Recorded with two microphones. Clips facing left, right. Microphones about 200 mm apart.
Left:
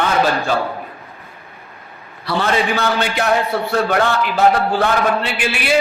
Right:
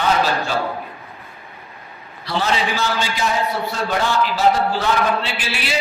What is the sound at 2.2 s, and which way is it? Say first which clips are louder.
A man's voice: left 3 dB; 60° left (ahead or behind).